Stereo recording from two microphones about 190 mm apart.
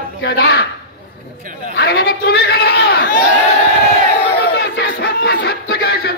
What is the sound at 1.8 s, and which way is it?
A man's voice, 60° left (ahead or behind).